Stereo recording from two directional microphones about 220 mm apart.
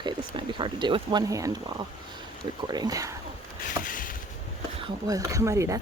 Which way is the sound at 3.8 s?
40° left (ahead or behind).